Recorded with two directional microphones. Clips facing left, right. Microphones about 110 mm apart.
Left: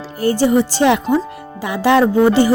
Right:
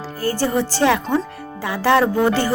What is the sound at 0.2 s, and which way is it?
Speech, 20° left (ahead or behind).